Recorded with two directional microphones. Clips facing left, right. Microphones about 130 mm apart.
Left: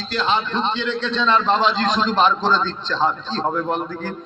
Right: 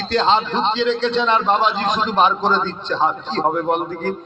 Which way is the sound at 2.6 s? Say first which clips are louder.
Right 1 dB; 20° right (ahead or behind).